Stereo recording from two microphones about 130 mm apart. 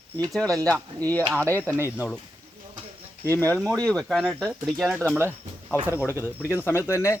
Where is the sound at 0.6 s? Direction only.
25° right (ahead or behind).